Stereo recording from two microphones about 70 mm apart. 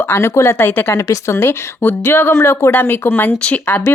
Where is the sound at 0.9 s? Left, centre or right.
Left.